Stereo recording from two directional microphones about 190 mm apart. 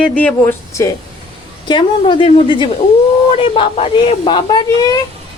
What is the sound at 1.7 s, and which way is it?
Speech, 25° left (ahead or behind).